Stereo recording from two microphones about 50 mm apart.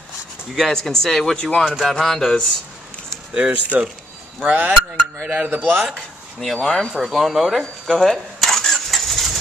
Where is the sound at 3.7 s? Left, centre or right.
Right.